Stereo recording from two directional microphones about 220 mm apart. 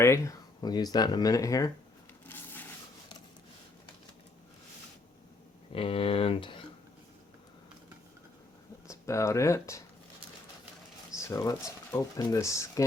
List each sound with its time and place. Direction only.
0.0 s speech: 15° left (ahead or behind)
2.2 s a sound: 10° left (ahead or behind)
5.7 s speech: 25° left (ahead or behind)
8.9 s speech: 15° left (ahead or behind)
11.2 s speech: 15° left (ahead or behind)